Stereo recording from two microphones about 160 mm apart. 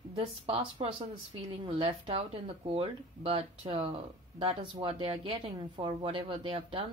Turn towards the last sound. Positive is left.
turn(degrees=-35)  # may be behind; listen again after turning